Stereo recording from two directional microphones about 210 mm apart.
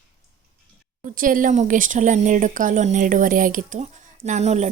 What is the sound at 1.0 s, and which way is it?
Speech, 40° right (ahead or behind).